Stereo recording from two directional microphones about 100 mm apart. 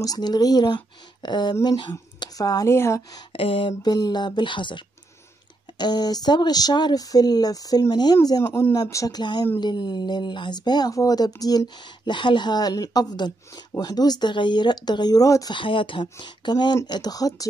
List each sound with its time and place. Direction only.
0.0 s speech: 40° left (ahead or behind)
2.7 s speech: 25° left (ahead or behind)
3.3 s a sound: 65° left (ahead or behind)
3.8 s speech: 45° left (ahead or behind); by 8.7 s 25° left (ahead or behind)
8.9 s speech: 35° left (ahead or behind)
9.2 s speech: 50° left (ahead or behind)
15.5 s speech: 55° left (ahead or behind); by 17.5 s 40° left (ahead or behind)